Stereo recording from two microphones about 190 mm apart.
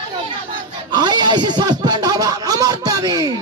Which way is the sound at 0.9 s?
25° right (ahead or behind).